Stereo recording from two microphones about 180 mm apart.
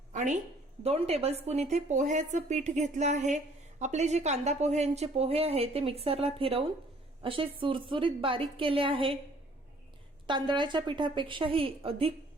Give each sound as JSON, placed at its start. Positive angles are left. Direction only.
{"t": 0.1, "sound": "a sound", "side_deg": -45}
{"t": 0.8, "sound": "a woman's voice", "side_deg": -35}
{"t": 10.2, "sound": "a woman's voice", "side_deg": -25}